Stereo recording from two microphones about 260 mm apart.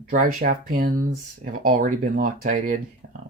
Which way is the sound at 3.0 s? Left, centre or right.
Right.